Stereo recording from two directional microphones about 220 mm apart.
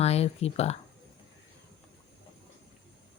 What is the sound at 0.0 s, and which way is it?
Speech, 30° left (ahead or behind).